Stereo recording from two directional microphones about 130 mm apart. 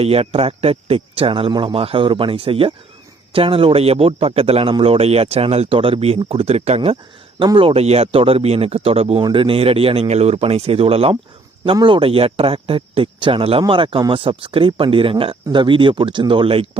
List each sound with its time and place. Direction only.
0.0 s speech: 50° right (ahead or behind)